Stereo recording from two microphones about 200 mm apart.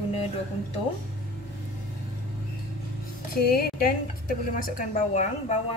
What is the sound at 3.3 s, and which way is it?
A woman's voice, 50° left (ahead or behind).